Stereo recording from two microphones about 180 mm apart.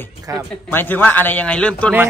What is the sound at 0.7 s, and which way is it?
A man's voice, 10° left (ahead or behind).